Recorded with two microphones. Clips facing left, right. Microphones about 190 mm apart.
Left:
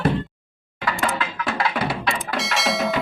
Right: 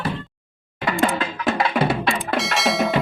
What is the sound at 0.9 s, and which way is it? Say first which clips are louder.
Music: right 3 dB; 25° right (ahead or behind).